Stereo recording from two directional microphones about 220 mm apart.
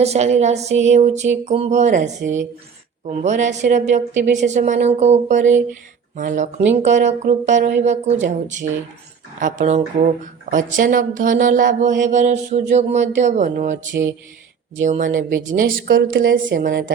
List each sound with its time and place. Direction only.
0.0 s speech: 30° right (ahead or behind)
14.8 s a woman's voice: 35° right (ahead or behind); by 16.6 s 55° right (ahead or behind)
16.6 s a woman's voice: 45° right (ahead or behind)